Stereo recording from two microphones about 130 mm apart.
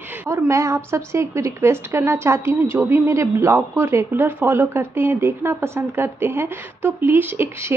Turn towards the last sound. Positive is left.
turn(degrees=-15)  # may be behind; listen again after turning